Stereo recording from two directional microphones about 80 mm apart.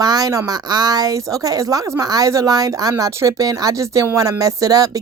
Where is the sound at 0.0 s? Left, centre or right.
Right.